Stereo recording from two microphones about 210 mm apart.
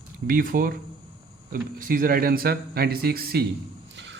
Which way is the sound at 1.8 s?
40° right (ahead or behind).